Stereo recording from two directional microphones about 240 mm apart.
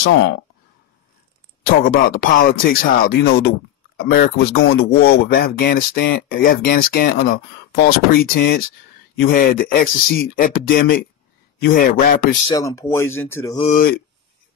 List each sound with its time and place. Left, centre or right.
1.9 s speech: left
12.4 s speech: centre
13.6 s speech: left